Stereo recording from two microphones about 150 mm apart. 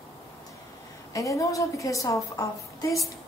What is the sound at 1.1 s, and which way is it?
A woman's voice, 20° left (ahead or behind).